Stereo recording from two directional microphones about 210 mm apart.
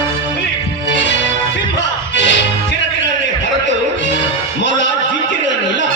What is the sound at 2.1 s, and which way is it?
Music, 60° left (ahead or behind).